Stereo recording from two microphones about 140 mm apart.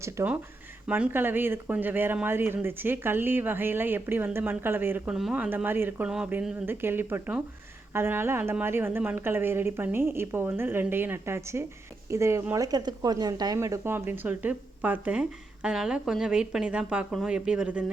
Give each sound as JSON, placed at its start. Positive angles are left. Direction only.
{"t": 0.0, "sound": "speech", "side_deg": -20}